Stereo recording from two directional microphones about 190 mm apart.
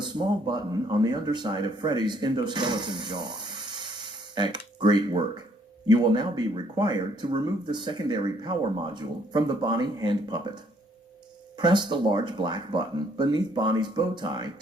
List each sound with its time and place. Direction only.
0.0 s speech: 25° right (ahead or behind)